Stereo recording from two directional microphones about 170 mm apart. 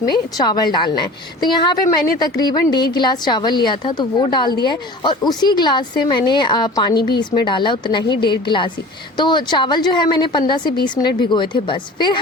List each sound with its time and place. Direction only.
0.0 s a woman's voice: 25° left (ahead or behind)